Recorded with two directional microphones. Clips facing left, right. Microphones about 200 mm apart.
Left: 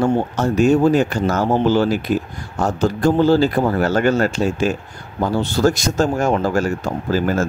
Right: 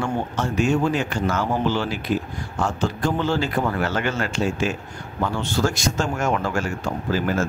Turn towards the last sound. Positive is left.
turn(degrees=40)  # may be behind; listen again after turning